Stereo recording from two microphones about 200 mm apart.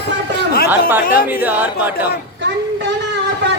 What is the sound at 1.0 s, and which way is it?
Speech, 45° left (ahead or behind).